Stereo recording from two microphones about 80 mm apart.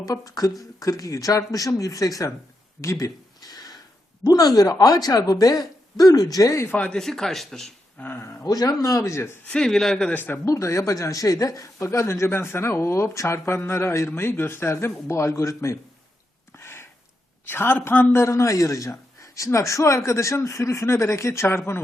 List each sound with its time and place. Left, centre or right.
0.0 s speech: left
2.8 s a sound: left
4.2 s speech: left
6.7 s a man's voice: centre
6.9 s speech: centre
7.9 s speech: left
8.4 s speech: left
9.5 s a man's voice: centre
10.1 s a man's voice: left
10.4 s speech: left
16.6 s a sound: left
17.4 s speech: left